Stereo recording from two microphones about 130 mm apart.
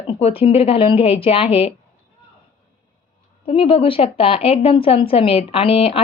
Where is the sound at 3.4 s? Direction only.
45° left (ahead or behind).